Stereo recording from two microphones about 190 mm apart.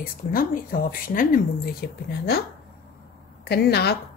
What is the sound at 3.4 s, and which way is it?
Speech, 60° left (ahead or behind).